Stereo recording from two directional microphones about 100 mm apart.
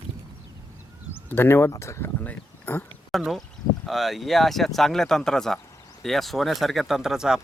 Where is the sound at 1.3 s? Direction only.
20° left (ahead or behind).